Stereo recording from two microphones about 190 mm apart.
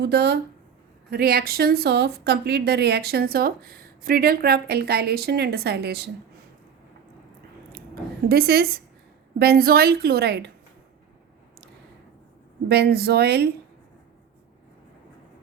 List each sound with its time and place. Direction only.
0.0 s a woman's voice: 60° right (ahead or behind)
8.3 s a woman's voice: 55° right (ahead or behind)
12.6 s a woman's voice: 60° right (ahead or behind)